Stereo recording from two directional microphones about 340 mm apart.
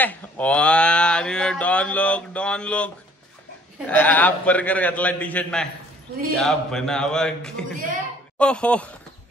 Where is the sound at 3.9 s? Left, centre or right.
Centre.